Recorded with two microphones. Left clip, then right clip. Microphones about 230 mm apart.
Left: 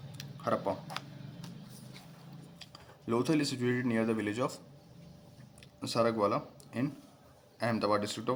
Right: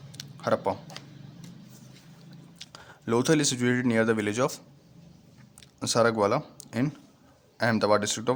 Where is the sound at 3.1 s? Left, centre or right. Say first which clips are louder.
Right 7 dB; right.